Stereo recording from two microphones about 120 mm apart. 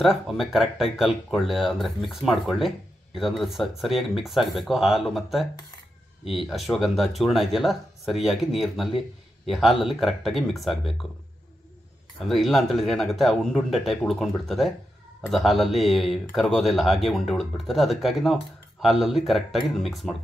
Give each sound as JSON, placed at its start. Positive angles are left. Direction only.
{"t": 0.0, "sound": "speech", "side_deg": 0}
{"t": 12.2, "sound": "speech", "side_deg": 0}